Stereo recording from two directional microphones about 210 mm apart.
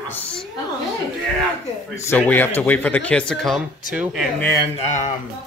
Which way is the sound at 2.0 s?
10° left (ahead or behind).